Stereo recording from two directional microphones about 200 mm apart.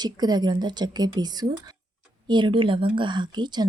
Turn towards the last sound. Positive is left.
turn(degrees=-20)  # may be behind; listen again after turning